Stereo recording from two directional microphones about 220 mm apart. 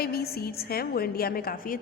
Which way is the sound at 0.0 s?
45° left (ahead or behind).